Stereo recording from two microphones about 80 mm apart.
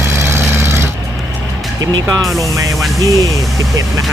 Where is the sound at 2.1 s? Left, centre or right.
Right.